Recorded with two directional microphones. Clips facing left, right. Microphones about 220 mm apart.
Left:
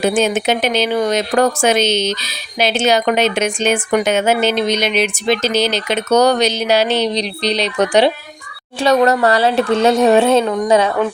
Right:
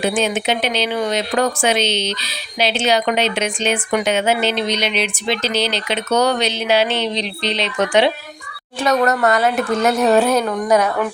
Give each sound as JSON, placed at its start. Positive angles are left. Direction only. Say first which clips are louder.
{"t": 0.0, "sound": "speech", "louder": "left 4 dB", "side_deg": 45}